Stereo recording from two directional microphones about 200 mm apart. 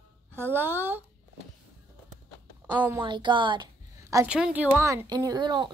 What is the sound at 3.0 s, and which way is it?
A woman's voice, 25° right (ahead or behind).